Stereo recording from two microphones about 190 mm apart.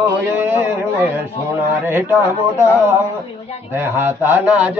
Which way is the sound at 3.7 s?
10° right (ahead or behind).